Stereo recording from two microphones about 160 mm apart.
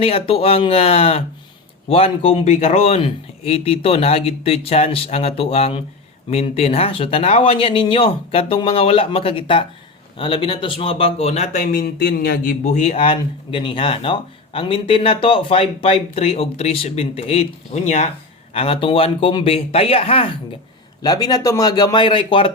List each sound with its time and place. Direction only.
0.0 s speech: 35° left (ahead or behind); by 12.5 s 70° left (ahead or behind)
12.6 s speech: 45° left (ahead or behind)
21.0 s speech: 25° left (ahead or behind)